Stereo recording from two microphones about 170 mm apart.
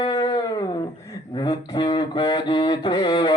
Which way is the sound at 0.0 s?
25° left (ahead or behind).